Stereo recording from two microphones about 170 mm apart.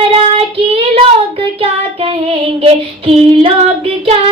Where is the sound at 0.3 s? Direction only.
35° right (ahead or behind).